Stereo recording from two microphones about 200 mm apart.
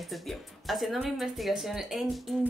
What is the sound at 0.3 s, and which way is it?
Speech, centre (ahead or behind).